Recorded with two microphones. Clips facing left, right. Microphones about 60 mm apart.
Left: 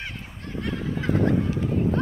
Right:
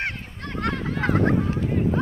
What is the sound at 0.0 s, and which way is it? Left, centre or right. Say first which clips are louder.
Goose: right 6 dB; right.